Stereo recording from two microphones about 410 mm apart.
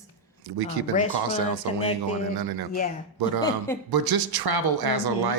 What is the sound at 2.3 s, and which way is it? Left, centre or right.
Speech, right.